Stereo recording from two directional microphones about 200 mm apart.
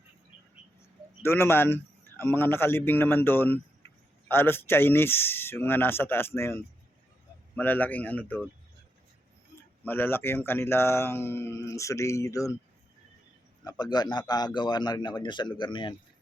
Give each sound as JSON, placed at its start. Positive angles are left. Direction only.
{"t": 1.2, "sound": "a man's voice", "side_deg": 10}
{"t": 9.8, "sound": "a man's voice", "side_deg": 10}
{"t": 13.7, "sound": "a man's voice", "side_deg": 20}